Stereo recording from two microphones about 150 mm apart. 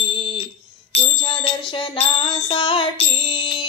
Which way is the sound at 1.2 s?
35° left (ahead or behind).